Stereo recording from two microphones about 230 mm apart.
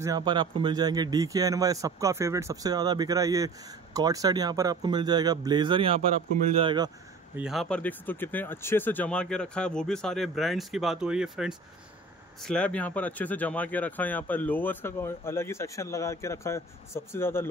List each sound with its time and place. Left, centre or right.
0.0 s a man's voice: centre
7.3 s speech: centre